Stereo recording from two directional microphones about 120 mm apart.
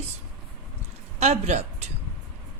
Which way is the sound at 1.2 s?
65° right (ahead or behind).